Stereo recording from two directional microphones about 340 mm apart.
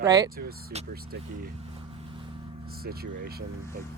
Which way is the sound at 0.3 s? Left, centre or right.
Right.